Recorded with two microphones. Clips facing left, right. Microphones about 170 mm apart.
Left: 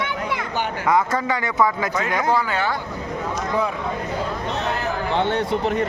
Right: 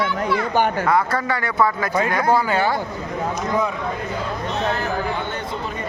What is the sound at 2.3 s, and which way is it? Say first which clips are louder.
Speech: right 3 dB; 40° right (ahead or behind).